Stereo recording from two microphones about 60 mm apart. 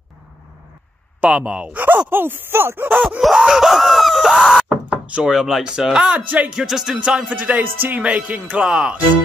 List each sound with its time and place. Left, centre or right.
1.2 s speech: centre
3.2 s a sound: centre
3.4 s screaming: centre
4.2 s knock: centre
5.2 s speech: centre
6.6 s speech: centre
7.2 s speech: right
8.5 s speech: centre